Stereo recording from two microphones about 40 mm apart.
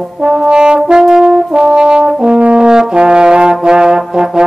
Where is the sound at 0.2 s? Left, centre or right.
Centre.